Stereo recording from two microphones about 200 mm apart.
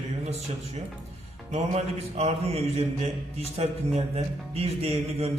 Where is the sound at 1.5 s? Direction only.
30° right (ahead or behind).